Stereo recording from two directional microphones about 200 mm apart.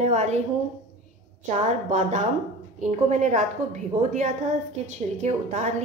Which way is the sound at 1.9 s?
35° right (ahead or behind).